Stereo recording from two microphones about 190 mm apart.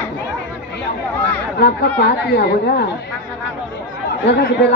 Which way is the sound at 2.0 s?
60° left (ahead or behind).